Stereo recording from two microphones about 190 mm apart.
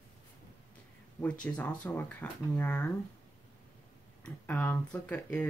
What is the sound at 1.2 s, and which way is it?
Speech, 5° left (ahead or behind).